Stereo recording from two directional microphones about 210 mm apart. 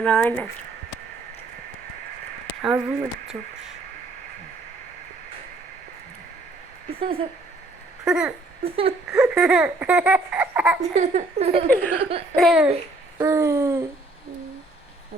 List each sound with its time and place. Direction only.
0.0 s speech: 5° left (ahead or behind)
2.6 s speech: 5° right (ahead or behind)
7.0 s speech: 25° right (ahead or behind)
8.0 s speech: 5° right (ahead or behind)
8.6 s speech: 25° right (ahead or behind)
9.1 s speech: 5° right (ahead or behind)
10.8 s speech: 30° right (ahead or behind)
12.4 s speech: 5° right (ahead or behind)
13.1 s speech: 15° right (ahead or behind)